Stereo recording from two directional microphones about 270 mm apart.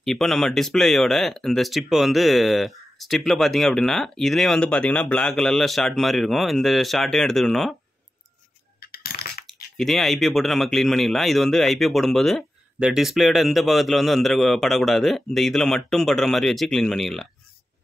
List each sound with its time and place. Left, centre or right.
0.0 s speech: centre
8.7 s coin: left
9.8 s speech: centre